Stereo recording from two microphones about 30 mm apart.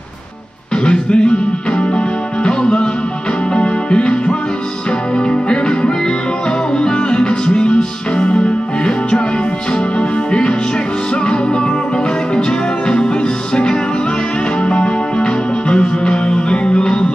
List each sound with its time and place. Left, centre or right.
0.8 s music: left
9.9 s music: left
14.6 s music: left